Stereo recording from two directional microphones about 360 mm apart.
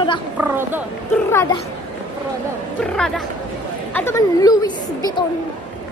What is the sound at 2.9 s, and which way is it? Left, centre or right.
A woman's voice, centre.